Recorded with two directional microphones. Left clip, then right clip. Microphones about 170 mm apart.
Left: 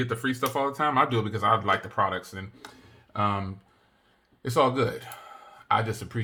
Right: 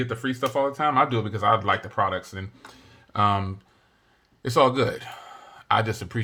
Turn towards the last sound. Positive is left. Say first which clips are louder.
# right 3 dB
turn(degrees=-25)  # may be behind; listen again after turning